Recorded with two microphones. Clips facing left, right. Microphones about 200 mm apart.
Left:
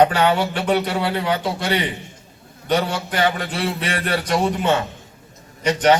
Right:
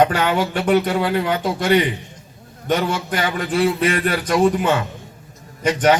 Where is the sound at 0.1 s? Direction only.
45° right (ahead or behind).